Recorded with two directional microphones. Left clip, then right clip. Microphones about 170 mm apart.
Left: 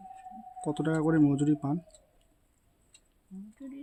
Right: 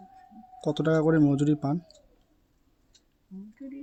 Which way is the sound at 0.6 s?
20° right (ahead or behind).